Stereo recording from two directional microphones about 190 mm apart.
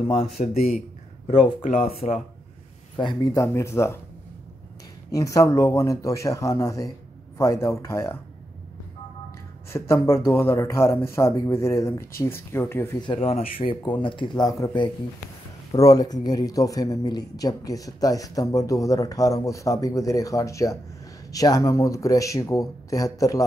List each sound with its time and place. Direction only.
0.1 s speech: 35° left (ahead or behind); by 4.0 s 15° left (ahead or behind)
5.1 s speech: 15° left (ahead or behind)
9.7 s speech: 15° left (ahead or behind)
13.0 s speech: 30° left (ahead or behind)